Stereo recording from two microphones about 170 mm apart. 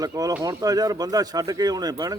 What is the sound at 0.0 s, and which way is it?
Speech, 20° right (ahead or behind).